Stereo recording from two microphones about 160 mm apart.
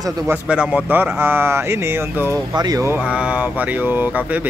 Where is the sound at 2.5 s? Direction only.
25° right (ahead or behind).